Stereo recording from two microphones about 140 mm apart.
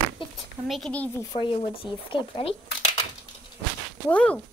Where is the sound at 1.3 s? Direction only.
40° left (ahead or behind).